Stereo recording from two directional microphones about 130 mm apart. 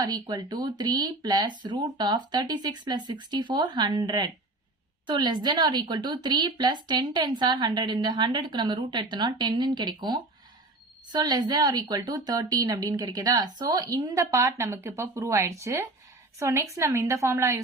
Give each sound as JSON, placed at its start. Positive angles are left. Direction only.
{"t": 0.0, "sound": "a woman's voice", "side_deg": -30}